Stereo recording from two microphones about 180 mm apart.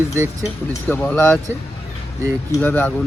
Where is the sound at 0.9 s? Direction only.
10° left (ahead or behind).